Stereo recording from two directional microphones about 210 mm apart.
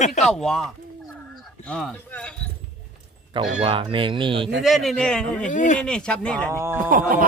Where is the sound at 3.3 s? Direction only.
30° right (ahead or behind).